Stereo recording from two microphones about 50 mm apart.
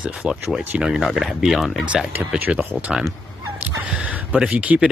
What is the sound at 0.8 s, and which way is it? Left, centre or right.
Speech, centre.